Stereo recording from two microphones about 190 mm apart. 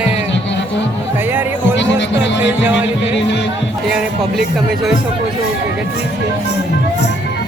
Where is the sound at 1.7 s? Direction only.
70° left (ahead or behind).